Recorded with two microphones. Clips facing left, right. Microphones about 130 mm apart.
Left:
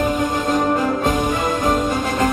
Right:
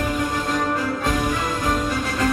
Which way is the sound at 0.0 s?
20° left (ahead or behind).